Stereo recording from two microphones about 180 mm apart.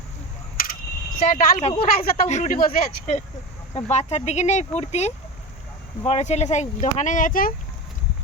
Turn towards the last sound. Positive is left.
turn(degrees=50)  # may be behind; listen again after turning